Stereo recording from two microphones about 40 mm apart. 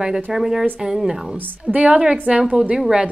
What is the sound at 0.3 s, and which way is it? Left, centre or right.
Speech, centre.